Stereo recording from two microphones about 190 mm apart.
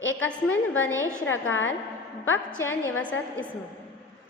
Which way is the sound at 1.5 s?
90° left.